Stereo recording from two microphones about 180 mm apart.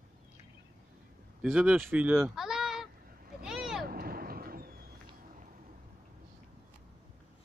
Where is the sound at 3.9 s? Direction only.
55° right (ahead or behind).